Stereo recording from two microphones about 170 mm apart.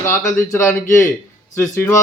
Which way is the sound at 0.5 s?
15° left (ahead or behind).